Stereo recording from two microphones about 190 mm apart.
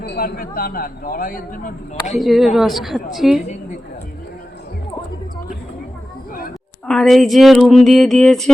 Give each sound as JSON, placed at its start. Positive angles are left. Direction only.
{"t": 0.0, "sound": "a man's voice", "side_deg": 55}
{"t": 2.1, "sound": "speech", "side_deg": 0}
{"t": 6.8, "sound": "speech", "side_deg": 5}